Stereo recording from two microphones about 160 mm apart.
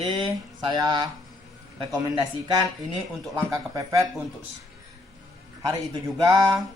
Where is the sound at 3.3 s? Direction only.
20° right (ahead or behind).